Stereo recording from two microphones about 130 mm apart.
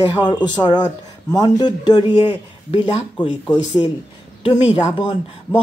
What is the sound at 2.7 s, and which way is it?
Speech, 50° left (ahead or behind).